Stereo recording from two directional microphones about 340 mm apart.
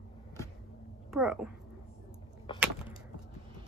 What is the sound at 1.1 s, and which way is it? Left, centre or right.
Speech, centre.